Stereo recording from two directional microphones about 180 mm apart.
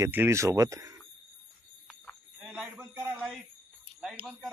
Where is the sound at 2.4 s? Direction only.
5° right (ahead or behind).